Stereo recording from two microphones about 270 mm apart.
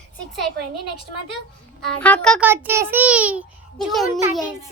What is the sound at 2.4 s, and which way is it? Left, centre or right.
A child's voice, centre.